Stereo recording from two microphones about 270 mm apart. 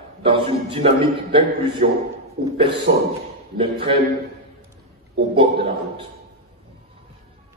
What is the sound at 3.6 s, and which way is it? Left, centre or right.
Speech, centre.